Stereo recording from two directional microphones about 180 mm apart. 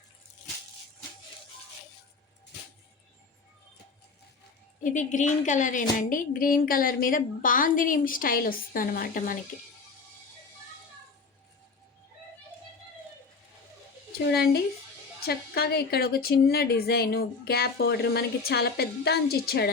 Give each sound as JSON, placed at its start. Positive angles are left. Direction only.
{"t": 4.8, "sound": "a woman's voice", "side_deg": 45}
{"t": 14.3, "sound": "a woman's voice", "side_deg": 60}